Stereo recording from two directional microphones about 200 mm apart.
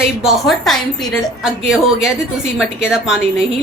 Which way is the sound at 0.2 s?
Centre (ahead or behind).